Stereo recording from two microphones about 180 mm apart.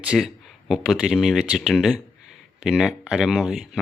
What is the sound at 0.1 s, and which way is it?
Speech, centre (ahead or behind).